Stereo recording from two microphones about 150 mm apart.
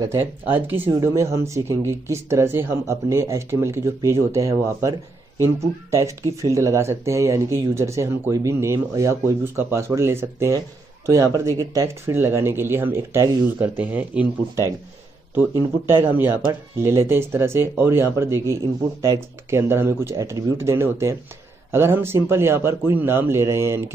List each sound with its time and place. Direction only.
0.0 s speech: 15° right (ahead or behind)